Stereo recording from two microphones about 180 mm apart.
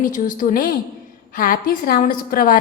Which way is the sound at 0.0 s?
45° left (ahead or behind).